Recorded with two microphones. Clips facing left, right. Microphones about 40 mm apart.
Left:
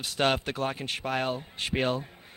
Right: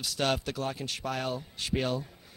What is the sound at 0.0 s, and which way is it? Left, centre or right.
Speech, left.